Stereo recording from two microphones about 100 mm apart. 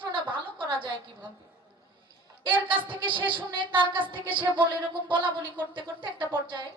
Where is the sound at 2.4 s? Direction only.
55° right (ahead or behind).